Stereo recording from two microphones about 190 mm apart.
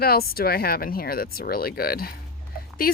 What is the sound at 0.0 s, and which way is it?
A woman's voice, 55° left (ahead or behind).